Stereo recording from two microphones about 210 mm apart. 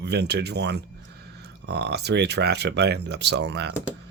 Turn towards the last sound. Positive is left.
turn(degrees=-55)  # may be behind; listen again after turning